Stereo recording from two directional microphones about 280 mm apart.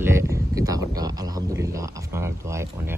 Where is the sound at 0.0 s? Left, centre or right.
Centre.